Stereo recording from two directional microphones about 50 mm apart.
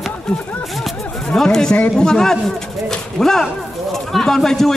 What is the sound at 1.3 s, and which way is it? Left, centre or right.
A man's voice, centre.